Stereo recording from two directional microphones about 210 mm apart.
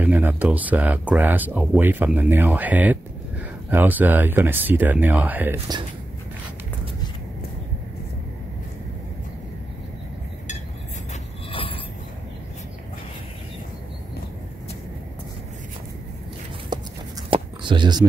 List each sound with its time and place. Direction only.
0.0 s speech: 10° right (ahead or behind)
11.5 s mechanisms: 25° left (ahead or behind)
16.7 s a sound: 20° right (ahead or behind)